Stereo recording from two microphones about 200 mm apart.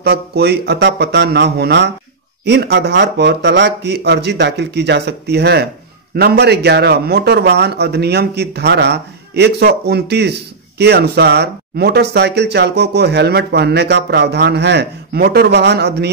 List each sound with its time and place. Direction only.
0.0 s speech: 55° right (ahead or behind)